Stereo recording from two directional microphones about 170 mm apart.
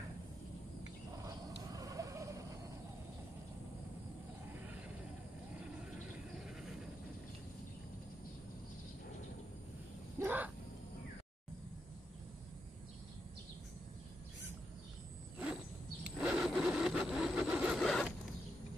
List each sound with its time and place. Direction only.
1.2 s vehicle: 20° right (ahead or behind)
6.3 s vehicle: 5° right (ahead or behind)
10.1 s a sound: 10° right (ahead or behind)
16.2 s vehicle: centre (ahead or behind)